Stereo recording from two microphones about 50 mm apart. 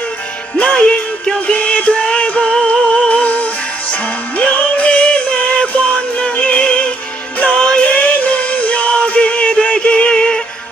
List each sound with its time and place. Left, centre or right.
0.6 s music: left